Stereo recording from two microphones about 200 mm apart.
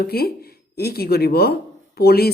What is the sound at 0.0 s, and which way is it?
Speech, 50° left (ahead or behind).